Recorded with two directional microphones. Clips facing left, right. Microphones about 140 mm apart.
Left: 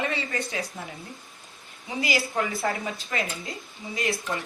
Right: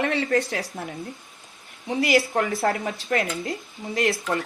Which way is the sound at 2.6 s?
50° right (ahead or behind).